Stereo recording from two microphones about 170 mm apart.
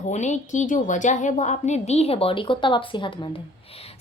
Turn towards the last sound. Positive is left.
turn(degrees=35)  # may be behind; listen again after turning